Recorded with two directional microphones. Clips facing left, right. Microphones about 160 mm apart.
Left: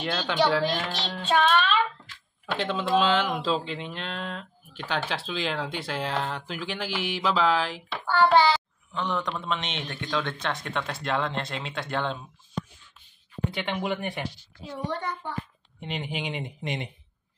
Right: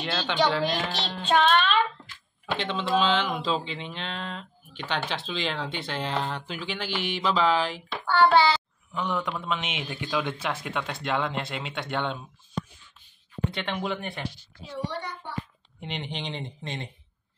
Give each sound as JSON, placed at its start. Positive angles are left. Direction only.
{"t": 0.2, "sound": "speech", "side_deg": 5}
{"t": 8.9, "sound": "speech", "side_deg": -5}
{"t": 13.5, "sound": "speech", "side_deg": 10}
{"t": 14.9, "sound": "a child's voice", "side_deg": 50}
{"t": 15.8, "sound": "speech", "side_deg": 5}